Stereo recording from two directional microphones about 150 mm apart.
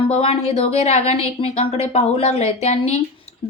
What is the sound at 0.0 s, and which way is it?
A woman's voice, 40° left (ahead or behind).